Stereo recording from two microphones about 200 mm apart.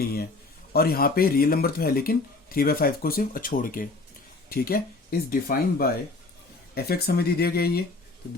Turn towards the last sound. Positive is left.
turn(degrees=50)  # may be behind; listen again after turning